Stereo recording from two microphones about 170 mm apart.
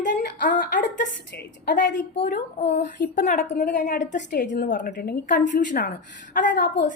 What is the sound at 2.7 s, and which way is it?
Speech, 70° left (ahead or behind).